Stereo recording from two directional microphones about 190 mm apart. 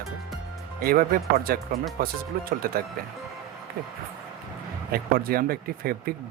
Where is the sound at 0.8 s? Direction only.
50° right (ahead or behind).